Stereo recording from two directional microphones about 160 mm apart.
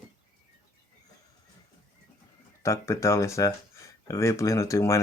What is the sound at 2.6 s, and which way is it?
Speech, 20° left (ahead or behind).